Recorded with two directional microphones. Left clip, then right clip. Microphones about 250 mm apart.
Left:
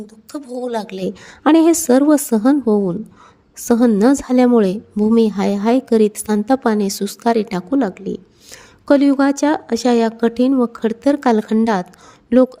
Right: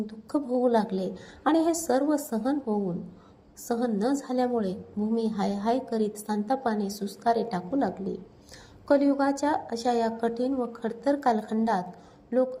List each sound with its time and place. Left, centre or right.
0.3 s a woman's voice: left